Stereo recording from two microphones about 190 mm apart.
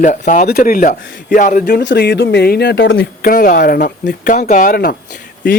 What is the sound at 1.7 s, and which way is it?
Speech, 65° left (ahead or behind).